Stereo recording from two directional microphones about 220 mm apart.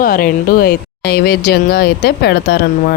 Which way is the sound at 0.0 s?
40° left (ahead or behind).